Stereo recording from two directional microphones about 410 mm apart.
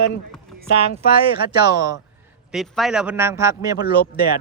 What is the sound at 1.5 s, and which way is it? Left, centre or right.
Speech, centre.